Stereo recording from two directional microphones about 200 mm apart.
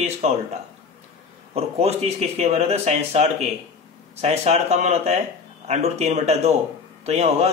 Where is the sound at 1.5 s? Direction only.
30° right (ahead or behind).